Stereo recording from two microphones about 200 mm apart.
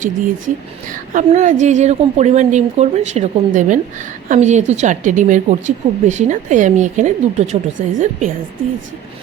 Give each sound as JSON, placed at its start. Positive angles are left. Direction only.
{"t": 0.0, "sound": "a woman's voice", "side_deg": -40}